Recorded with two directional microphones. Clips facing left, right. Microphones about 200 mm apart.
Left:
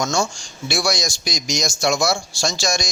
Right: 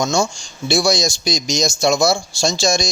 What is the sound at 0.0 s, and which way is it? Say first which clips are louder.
A man's voice: right 3 dB; 20° right (ahead or behind).